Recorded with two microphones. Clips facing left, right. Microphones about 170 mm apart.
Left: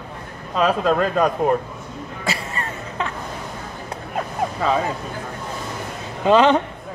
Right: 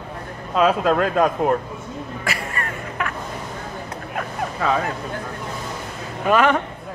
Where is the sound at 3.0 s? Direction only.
25° left (ahead or behind).